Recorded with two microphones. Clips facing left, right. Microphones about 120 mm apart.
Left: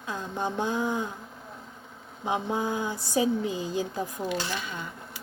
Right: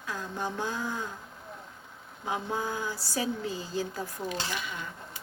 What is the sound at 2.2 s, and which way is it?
Speech, 20° left (ahead or behind).